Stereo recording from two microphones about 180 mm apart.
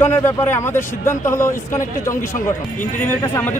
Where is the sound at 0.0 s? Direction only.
15° left (ahead or behind).